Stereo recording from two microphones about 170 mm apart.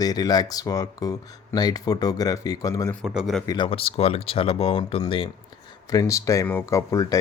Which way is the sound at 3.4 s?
30° left (ahead or behind).